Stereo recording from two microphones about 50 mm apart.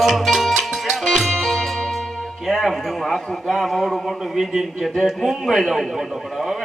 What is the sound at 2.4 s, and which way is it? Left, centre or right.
A man's voice, centre.